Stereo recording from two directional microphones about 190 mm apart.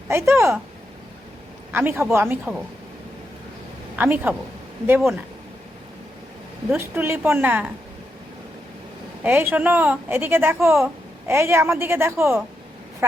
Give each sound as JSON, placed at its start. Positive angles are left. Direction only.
{"t": 0.1, "sound": "a woman's voice", "side_deg": -15}
{"t": 1.7, "sound": "a woman's voice", "side_deg": -10}
{"t": 3.9, "sound": "a woman's voice", "side_deg": -10}
{"t": 6.7, "sound": "a woman's voice", "side_deg": -10}
{"t": 9.2, "sound": "a woman's voice", "side_deg": -10}